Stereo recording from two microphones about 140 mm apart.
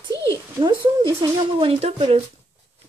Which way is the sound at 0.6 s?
35° right (ahead or behind).